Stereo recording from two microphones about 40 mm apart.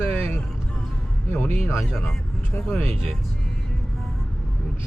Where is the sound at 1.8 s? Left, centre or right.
Centre.